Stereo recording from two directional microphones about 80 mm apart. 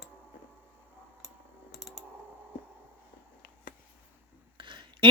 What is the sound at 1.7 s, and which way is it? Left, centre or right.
Clicking, centre.